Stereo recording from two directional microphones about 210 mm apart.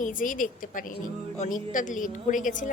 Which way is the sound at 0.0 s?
40° left (ahead or behind).